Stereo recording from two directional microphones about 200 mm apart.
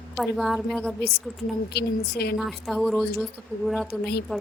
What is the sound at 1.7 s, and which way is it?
Speech, 55° left (ahead or behind).